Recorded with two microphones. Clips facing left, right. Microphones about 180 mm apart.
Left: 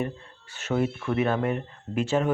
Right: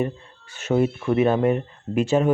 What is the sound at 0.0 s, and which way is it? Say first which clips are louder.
Speech: right 5 dB; 15° right (ahead or behind).